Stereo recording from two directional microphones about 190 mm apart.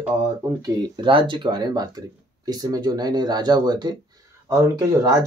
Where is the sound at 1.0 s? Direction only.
25° right (ahead or behind).